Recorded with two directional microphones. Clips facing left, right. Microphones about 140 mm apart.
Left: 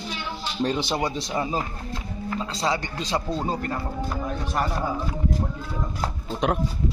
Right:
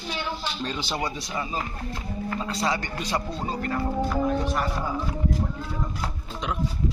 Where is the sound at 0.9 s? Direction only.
20° left (ahead or behind).